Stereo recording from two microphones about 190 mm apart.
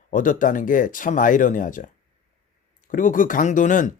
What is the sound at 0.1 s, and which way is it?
Speech, 45° left (ahead or behind).